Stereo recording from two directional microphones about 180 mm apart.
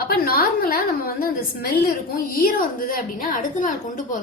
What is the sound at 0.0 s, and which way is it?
A woman's voice, 55° left (ahead or behind).